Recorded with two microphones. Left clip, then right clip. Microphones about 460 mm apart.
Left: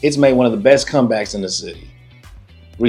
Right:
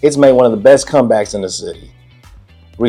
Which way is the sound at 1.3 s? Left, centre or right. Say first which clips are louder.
Right 3 dB; right.